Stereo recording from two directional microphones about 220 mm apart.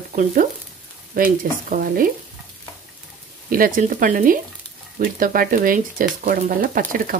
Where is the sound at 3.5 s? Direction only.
40° right (ahead or behind).